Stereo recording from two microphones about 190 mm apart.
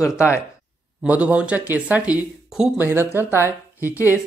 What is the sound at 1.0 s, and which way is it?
Speech, 5° right (ahead or behind).